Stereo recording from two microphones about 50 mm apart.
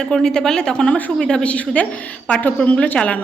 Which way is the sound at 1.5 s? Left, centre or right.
Left.